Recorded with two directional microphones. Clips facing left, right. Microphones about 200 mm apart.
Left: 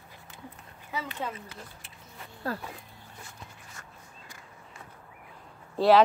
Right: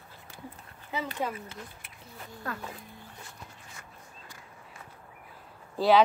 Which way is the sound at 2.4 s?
30° left (ahead or behind).